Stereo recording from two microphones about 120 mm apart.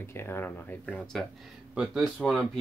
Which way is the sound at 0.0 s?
20° left (ahead or behind).